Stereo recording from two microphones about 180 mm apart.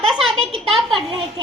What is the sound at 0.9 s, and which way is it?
Speech, 30° right (ahead or behind).